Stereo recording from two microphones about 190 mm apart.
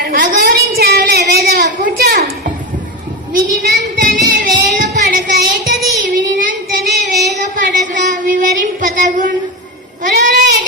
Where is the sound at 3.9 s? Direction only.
50° right (ahead or behind).